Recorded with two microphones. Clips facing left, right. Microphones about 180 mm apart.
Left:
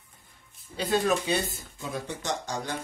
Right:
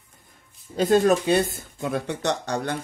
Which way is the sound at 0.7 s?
45° right (ahead or behind).